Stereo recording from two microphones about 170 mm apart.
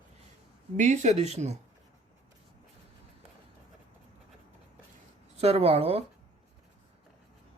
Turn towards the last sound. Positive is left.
turn(degrees=-35)  # may be behind; listen again after turning